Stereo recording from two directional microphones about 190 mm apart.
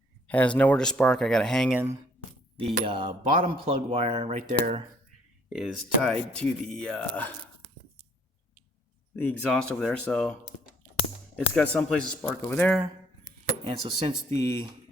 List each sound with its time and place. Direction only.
0.3 s speech: 5° left (ahead or behind)
2.6 s speech: 30° right (ahead or behind)
5.5 s speech: 5° right (ahead or behind)
9.1 s speech: 5° left (ahead or behind)
11.3 s speech: 5° left (ahead or behind)
14.0 s speech: 30° right (ahead or behind)